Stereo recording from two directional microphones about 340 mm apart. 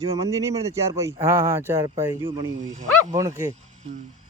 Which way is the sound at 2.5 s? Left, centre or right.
Right.